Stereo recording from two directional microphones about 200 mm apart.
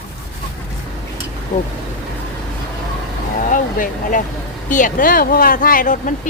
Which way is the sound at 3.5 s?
40° left (ahead or behind).